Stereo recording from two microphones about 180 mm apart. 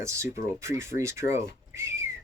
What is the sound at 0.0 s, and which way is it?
Speech, 15° right (ahead or behind).